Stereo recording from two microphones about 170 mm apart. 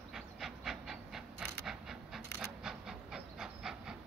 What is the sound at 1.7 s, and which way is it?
Pant, centre (ahead or behind).